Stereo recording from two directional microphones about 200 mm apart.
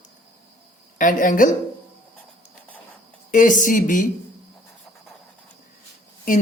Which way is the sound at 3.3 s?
40° left (ahead or behind).